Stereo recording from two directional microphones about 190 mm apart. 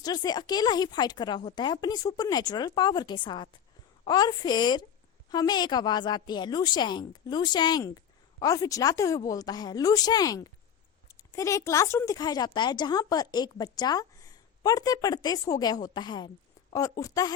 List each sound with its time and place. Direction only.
0.0 s speech: 20° left (ahead or behind)